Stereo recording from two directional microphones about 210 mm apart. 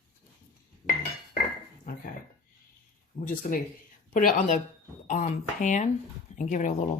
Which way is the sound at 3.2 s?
40° left (ahead or behind).